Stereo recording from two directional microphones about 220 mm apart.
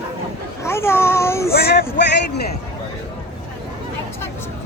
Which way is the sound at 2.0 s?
50° left (ahead or behind).